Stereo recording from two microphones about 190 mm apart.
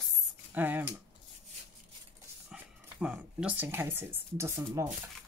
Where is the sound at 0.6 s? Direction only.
10° right (ahead or behind).